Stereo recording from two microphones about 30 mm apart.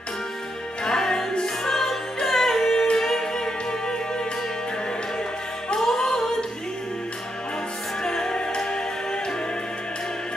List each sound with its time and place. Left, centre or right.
0.8 s music: left
5.8 s music: centre
8.0 s music: left